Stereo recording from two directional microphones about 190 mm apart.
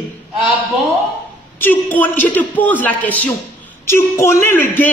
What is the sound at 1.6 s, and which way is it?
Speech, 10° left (ahead or behind).